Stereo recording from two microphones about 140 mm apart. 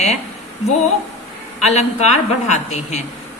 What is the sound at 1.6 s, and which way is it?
A woman's voice, 50° left (ahead or behind).